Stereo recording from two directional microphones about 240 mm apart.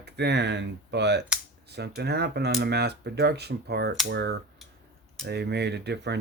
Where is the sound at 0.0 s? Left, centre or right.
Right.